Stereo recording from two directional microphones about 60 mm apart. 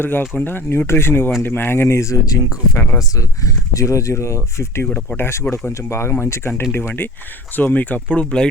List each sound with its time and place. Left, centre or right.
0.0 s speech: left
3.2 s speech: left
4.9 s speech: left; by 8.4 s centre